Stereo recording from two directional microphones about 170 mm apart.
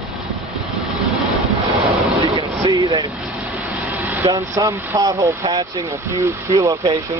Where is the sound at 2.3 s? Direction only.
25° right (ahead or behind).